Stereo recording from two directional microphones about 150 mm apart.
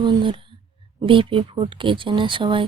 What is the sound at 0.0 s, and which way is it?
A woman's voice, 30° right (ahead or behind).